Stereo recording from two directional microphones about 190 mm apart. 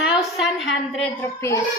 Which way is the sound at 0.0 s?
Centre (ahead or behind).